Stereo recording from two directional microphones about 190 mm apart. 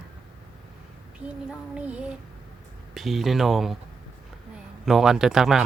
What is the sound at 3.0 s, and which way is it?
Speech, centre (ahead or behind).